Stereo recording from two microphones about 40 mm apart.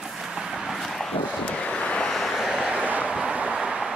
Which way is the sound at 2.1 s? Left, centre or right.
Centre.